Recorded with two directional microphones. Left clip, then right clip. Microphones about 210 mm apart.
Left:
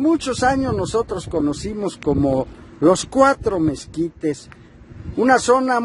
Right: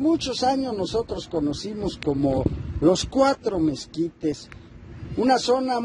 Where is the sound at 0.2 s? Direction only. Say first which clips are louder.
Left 5 dB; 45° left (ahead or behind).